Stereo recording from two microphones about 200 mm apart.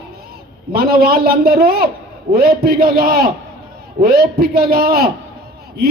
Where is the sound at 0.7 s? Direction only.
50° right (ahead or behind).